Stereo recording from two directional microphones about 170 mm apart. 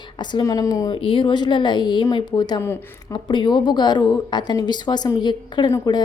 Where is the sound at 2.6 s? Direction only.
15° left (ahead or behind).